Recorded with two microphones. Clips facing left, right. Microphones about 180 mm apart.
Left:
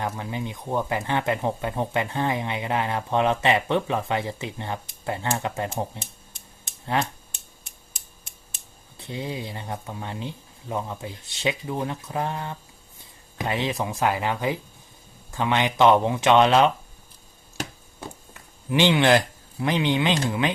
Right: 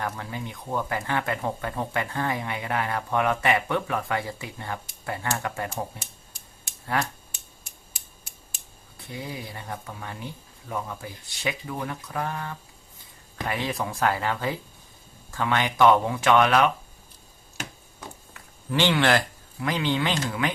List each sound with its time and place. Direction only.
0.0 s speech: 20° left (ahead or behind)
9.0 s speech: 25° left (ahead or behind)
18.7 s speech: 20° left (ahead or behind)